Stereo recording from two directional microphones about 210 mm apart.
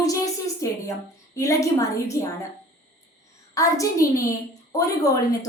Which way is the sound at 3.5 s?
15° left (ahead or behind).